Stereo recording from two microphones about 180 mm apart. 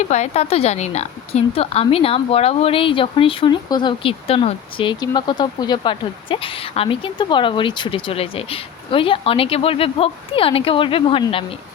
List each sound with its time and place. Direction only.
0.0 s a woman's voice: 40° left (ahead or behind)